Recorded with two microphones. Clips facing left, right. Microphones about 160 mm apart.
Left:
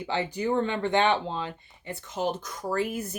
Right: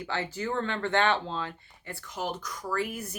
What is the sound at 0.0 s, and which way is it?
Speech, 15° left (ahead or behind).